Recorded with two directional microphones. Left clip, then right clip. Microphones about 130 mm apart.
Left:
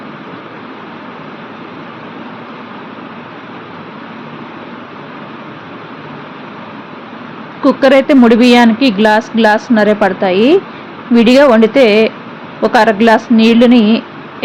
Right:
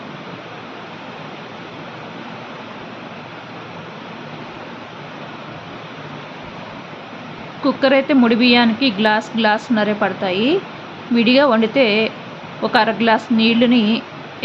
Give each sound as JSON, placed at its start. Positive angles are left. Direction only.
{"t": 7.6, "sound": "speech", "side_deg": 20}